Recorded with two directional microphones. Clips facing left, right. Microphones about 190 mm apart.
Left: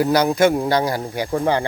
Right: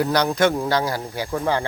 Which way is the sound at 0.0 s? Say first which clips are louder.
Left 3 dB; 5° left (ahead or behind).